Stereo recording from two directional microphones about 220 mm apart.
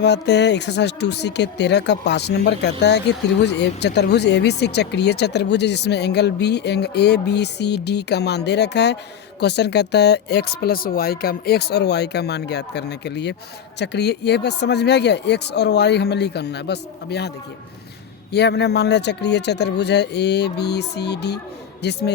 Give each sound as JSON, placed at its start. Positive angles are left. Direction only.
{"t": 0.0, "sound": "speech", "side_deg": 50}